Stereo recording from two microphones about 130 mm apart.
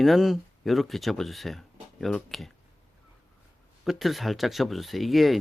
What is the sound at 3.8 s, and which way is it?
Speech, centre (ahead or behind).